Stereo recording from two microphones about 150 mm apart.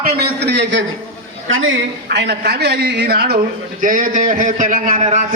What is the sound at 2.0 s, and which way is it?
A man's voice, 90° right.